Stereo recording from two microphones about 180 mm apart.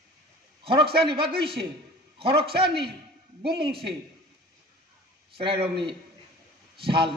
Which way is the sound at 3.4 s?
30° right (ahead or behind).